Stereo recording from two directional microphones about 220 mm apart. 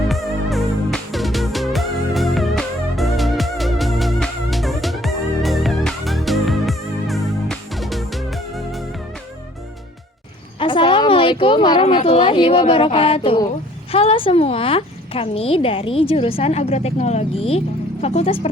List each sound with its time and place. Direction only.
0.1 s music: centre (ahead or behind)
10.6 s a sound: 25° left (ahead or behind)
13.9 s a woman's voice: 25° left (ahead or behind)